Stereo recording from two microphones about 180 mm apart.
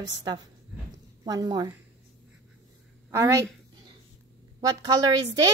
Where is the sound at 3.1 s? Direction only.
15° right (ahead or behind).